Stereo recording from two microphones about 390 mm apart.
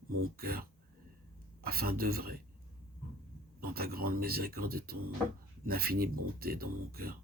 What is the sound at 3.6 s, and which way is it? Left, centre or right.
Speech, right.